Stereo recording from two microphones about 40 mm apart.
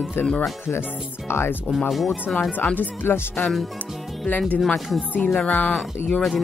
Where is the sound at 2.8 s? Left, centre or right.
Left.